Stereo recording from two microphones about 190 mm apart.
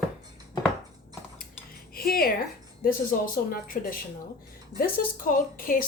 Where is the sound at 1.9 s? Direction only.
50° left (ahead or behind).